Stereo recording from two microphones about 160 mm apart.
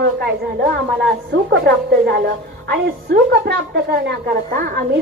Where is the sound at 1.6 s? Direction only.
80° right.